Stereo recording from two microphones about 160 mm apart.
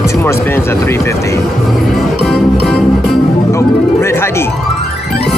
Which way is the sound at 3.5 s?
15° left (ahead or behind).